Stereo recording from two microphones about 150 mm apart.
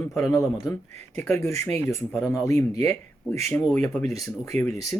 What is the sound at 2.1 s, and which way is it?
Speech, centre (ahead or behind).